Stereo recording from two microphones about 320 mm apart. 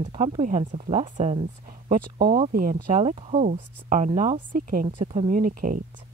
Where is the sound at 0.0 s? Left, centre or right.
Centre.